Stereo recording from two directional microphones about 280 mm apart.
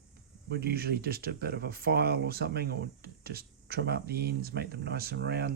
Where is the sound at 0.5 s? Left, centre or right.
Right.